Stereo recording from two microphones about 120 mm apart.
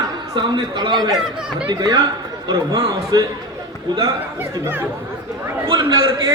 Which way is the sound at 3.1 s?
35° right (ahead or behind).